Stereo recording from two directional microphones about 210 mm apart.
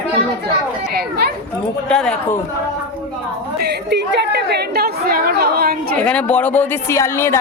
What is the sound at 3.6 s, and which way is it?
A woman's voice, 50° right (ahead or behind).